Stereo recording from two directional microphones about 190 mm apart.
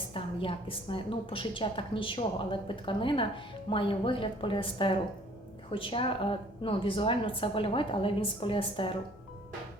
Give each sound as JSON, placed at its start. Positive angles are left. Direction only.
{"t": 0.1, "sound": "a woman's voice", "side_deg": 30}